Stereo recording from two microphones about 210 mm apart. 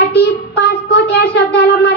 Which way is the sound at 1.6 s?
55° left (ahead or behind).